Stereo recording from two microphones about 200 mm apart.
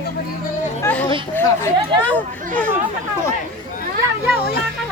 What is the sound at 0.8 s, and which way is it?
A child's voice, 10° left (ahead or behind).